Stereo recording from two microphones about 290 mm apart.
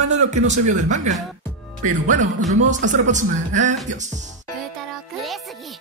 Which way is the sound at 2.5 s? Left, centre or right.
Right.